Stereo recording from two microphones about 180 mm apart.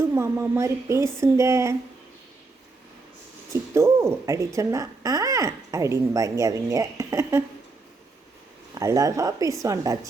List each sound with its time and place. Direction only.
0.0 s speech: 15° right (ahead or behind)
3.5 s speech: 15° right (ahead or behind)
8.7 s speech: 20° right (ahead or behind)